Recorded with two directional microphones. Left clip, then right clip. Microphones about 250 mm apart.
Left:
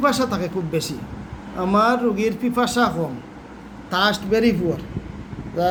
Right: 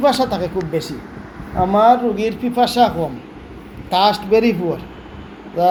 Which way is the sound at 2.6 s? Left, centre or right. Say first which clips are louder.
Right 6 dB; left.